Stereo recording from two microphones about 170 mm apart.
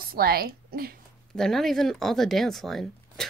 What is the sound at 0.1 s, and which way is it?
Speech, 60° right (ahead or behind).